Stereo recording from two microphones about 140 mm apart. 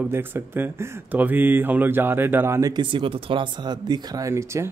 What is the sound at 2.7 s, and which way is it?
Speech, 35° right (ahead or behind).